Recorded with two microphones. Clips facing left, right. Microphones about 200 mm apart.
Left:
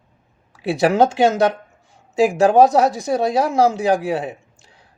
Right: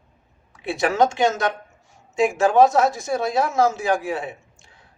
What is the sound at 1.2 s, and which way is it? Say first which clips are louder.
Speech: left 5 dB; 35° left (ahead or behind).